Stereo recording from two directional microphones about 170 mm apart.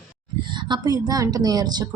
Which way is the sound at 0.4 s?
25° right (ahead or behind).